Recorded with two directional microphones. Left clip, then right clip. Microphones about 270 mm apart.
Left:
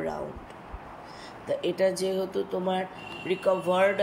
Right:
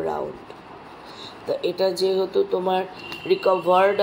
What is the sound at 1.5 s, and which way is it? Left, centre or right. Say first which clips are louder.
A man's voice: right 3 dB; left.